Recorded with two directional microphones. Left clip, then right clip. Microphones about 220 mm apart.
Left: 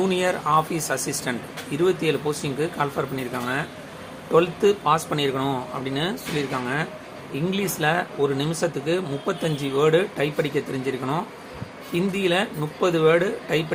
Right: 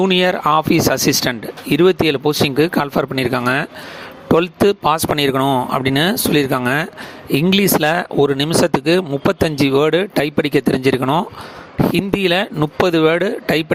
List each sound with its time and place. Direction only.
0.0 s speech: 40° right (ahead or behind)